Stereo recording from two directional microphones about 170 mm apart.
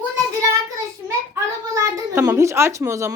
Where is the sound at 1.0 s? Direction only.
15° right (ahead or behind).